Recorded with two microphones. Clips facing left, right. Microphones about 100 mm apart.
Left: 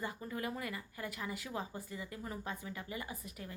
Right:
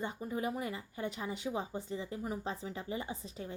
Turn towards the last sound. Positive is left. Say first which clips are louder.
# right 4 dB
turn(degrees=-25)  # may be behind; listen again after turning